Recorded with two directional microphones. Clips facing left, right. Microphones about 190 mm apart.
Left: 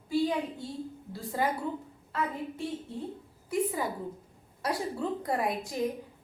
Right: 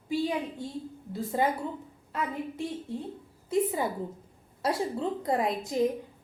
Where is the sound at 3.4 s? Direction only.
25° right (ahead or behind).